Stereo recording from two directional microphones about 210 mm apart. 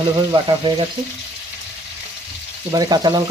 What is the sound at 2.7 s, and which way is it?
Speech, 20° right (ahead or behind).